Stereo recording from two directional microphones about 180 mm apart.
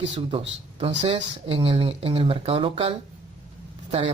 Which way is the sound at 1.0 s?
30° right (ahead or behind).